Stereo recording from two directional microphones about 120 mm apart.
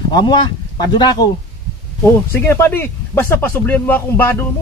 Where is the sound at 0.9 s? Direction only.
35° left (ahead or behind).